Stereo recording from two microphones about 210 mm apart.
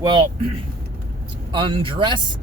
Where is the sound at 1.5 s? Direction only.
25° right (ahead or behind).